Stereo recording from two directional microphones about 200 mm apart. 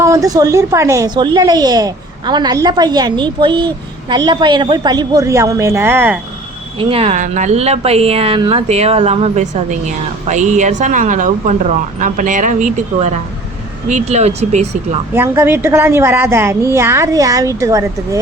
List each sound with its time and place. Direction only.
0.0 s a woman's voice: 15° right (ahead or behind)
6.7 s speech: 30° right (ahead or behind)
15.1 s a woman's voice: 10° right (ahead or behind)